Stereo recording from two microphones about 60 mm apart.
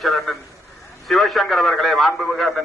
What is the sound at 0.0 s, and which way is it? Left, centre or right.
A man's voice, centre.